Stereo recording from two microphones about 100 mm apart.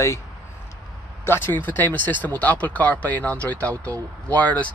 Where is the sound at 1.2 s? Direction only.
25° left (ahead or behind).